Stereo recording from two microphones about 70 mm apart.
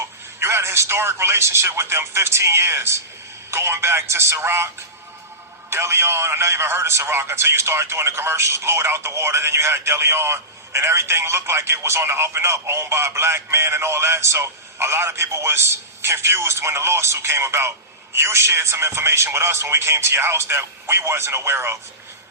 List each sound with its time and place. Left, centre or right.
0.3 s a man's voice: right
5.7 s a man's voice: right